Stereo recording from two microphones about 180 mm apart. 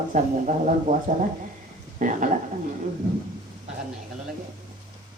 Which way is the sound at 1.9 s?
45° right (ahead or behind).